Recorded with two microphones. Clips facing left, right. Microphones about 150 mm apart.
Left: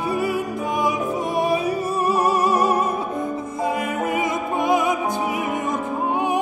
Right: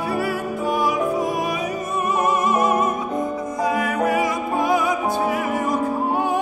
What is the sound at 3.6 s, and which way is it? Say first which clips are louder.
Music: right 3 dB; 25° left (ahead or behind).